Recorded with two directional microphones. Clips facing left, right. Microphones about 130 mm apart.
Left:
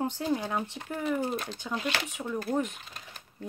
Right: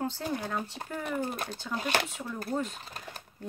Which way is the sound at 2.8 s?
35° right (ahead or behind).